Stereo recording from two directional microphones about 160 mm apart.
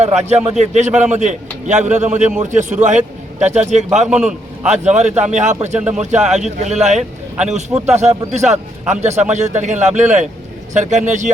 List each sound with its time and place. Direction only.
0.0 s a man's voice: 45° right (ahead or behind)
4.0 s a man's voice: 5° right (ahead or behind)
4.7 s a man's voice: 45° right (ahead or behind)